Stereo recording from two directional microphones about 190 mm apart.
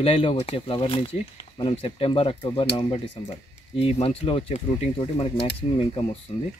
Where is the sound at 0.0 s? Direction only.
30° left (ahead or behind).